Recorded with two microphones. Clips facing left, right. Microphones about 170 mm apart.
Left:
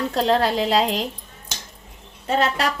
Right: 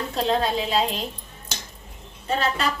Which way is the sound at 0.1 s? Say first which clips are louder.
Left 2 dB; 75° left (ahead or behind).